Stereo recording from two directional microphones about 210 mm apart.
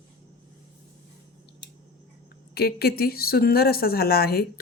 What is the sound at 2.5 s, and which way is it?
Speech, 45° left (ahead or behind).